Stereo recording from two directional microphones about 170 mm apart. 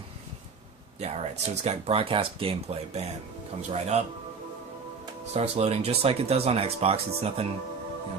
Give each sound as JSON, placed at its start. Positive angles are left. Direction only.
{"t": 0.9, "sound": "speech", "side_deg": -40}
{"t": 5.3, "sound": "speech", "side_deg": -40}